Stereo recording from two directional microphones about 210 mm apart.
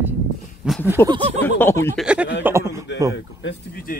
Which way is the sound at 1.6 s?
10° left (ahead or behind).